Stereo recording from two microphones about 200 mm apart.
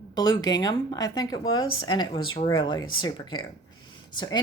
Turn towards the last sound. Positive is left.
turn(degrees=20)  # may be behind; listen again after turning